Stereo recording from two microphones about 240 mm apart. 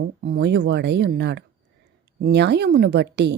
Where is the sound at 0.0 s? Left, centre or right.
Right.